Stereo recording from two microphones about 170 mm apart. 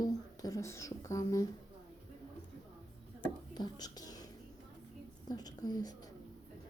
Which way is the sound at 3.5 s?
25° left (ahead or behind).